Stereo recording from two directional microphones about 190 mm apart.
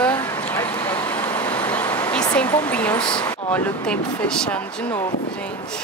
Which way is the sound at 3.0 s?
25° left (ahead or behind).